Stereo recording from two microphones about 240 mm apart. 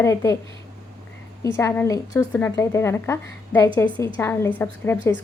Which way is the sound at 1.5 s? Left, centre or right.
Centre.